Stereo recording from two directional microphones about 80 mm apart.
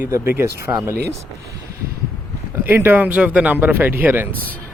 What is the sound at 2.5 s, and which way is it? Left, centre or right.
Speech, right.